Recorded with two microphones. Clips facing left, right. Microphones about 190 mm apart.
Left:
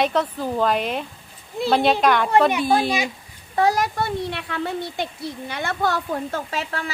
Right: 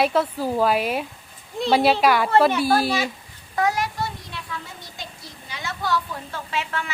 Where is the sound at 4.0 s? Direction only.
65° left (ahead or behind).